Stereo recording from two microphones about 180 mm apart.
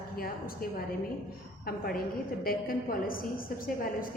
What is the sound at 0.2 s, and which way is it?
A woman's voice, 55° left (ahead or behind).